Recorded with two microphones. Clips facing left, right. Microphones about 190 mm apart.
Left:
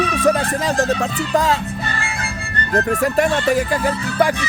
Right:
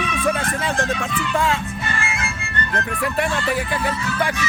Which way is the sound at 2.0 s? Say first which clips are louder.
Even; 35° left (ahead or behind).